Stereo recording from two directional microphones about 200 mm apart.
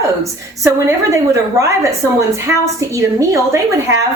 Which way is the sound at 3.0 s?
15° right (ahead or behind).